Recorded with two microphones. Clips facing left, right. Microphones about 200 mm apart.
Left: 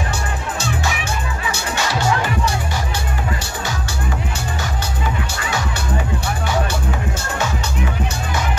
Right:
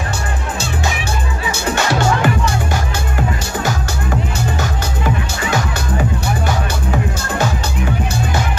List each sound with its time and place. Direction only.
1.8 s music: 50° right (ahead or behind)
6.2 s music: 40° right (ahead or behind)